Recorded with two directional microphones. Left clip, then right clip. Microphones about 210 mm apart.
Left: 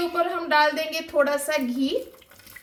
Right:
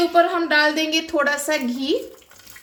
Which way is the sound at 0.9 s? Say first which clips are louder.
Right 2 dB; 45° right (ahead or behind).